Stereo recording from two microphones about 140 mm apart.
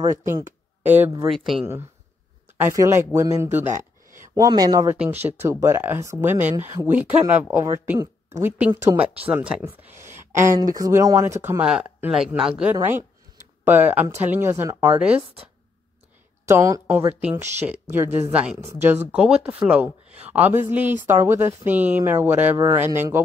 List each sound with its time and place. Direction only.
0.0 s speech: 20° right (ahead or behind)
1.3 s speech: centre (ahead or behind)
2.5 s speech: 20° right (ahead or behind)
4.4 s speech: 30° right (ahead or behind)
4.9 s speech: 10° right (ahead or behind)
5.4 s speech: 20° right (ahead or behind)
7.0 s speech: 10° right (ahead or behind)
13.7 s speech: 15° right (ahead or behind)
16.4 s speech: 20° right (ahead or behind)